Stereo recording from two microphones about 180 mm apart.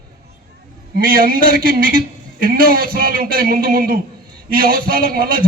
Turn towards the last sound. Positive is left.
turn(degrees=-55)  # may be behind; listen again after turning